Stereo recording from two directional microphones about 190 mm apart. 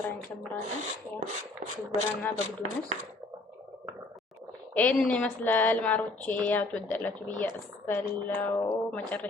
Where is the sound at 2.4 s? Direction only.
35° right (ahead or behind).